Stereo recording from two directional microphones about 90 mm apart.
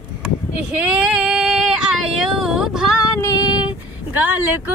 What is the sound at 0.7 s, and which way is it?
Female singing, 15° right (ahead or behind).